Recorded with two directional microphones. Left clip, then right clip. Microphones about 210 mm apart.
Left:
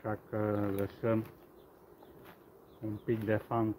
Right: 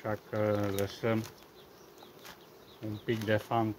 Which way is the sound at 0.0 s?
15° right (ahead or behind).